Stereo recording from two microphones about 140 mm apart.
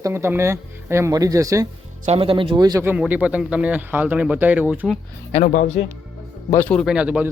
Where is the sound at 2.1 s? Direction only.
40° right (ahead or behind).